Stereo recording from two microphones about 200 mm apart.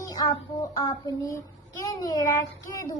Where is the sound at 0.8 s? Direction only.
20° left (ahead or behind).